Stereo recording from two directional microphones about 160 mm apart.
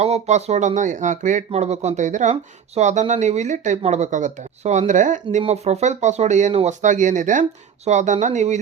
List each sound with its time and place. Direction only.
0.0 s speech: 45° right (ahead or behind)
5.4 s speech: 40° right (ahead or behind)